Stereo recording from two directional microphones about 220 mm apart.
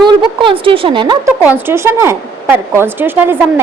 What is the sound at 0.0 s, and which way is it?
A woman's voice, 20° right (ahead or behind).